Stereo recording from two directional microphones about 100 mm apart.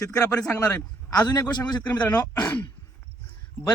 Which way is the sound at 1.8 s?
15° left (ahead or behind).